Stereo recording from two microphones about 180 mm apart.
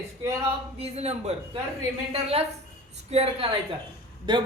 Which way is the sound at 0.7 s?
35° right (ahead or behind).